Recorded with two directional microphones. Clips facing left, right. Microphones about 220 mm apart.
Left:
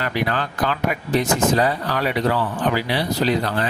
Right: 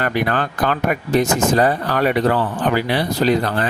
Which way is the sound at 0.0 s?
50° right (ahead or behind).